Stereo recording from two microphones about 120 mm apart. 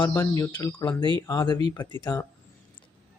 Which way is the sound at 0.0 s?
30° left (ahead or behind).